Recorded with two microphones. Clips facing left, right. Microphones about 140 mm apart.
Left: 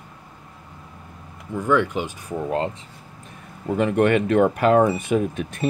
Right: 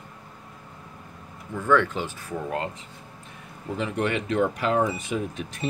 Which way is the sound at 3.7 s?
55° left (ahead or behind).